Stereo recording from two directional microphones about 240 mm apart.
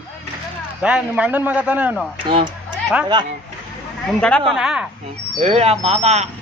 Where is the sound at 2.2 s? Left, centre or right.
Right.